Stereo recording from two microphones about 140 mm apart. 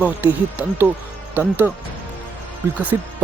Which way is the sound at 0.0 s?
10° right (ahead or behind).